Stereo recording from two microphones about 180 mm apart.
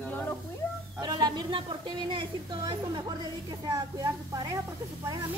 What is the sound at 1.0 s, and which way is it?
A woman's voice, 25° right (ahead or behind).